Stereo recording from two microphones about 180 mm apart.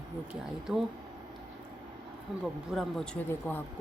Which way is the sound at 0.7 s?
5° right (ahead or behind).